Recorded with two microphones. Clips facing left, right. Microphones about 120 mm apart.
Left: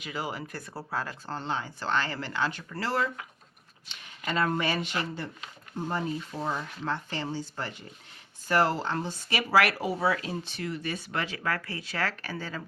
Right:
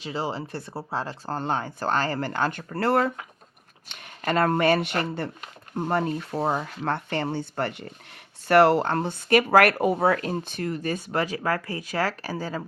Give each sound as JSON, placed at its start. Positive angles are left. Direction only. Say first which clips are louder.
{"t": 0.0, "sound": "speech", "louder": "right 5 dB", "side_deg": -30}
{"t": 1.3, "sound": "speech", "louder": "right 7 dB", "side_deg": -45}